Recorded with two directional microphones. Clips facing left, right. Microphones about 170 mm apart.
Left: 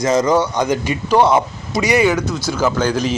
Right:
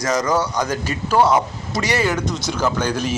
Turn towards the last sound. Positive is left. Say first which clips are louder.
# left 4 dB
turn(degrees=10)  # may be behind; listen again after turning